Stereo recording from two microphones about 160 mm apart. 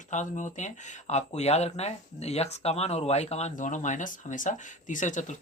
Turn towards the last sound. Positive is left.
turn(degrees=50)  # may be behind; listen again after turning